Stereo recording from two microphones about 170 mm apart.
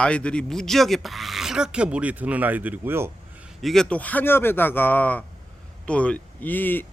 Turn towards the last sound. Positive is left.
turn(degrees=10)  # may be behind; listen again after turning